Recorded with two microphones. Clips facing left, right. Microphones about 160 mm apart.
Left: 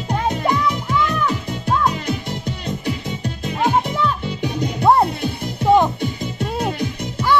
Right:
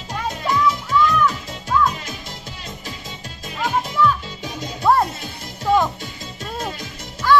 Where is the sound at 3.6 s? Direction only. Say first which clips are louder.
Left 1 dB; 30° left (ahead or behind).